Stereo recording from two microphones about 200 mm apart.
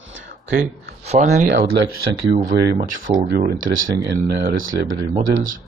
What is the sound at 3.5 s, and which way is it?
Speech, 85° right.